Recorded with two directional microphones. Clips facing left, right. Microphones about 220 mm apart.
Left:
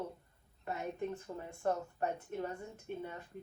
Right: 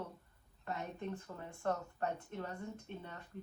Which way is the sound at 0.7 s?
10° left (ahead or behind).